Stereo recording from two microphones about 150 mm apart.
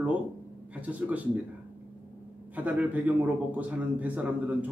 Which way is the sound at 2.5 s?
10° right (ahead or behind).